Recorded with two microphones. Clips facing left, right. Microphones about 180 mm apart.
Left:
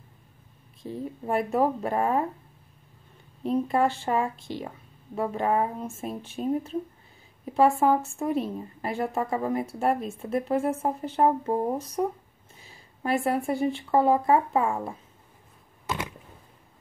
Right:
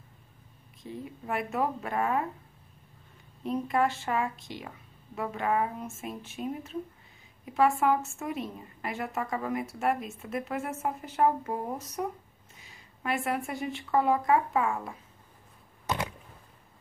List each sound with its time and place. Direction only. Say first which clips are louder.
0.8 s speech: left 5 dB; 35° left (ahead or behind)
3.4 s speech: left 4 dB; 30° left (ahead or behind)